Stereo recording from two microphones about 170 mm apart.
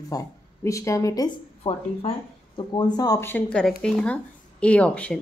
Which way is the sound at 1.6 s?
35° left (ahead or behind).